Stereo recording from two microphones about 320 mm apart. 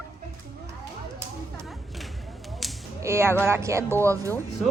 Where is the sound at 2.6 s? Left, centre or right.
Centre.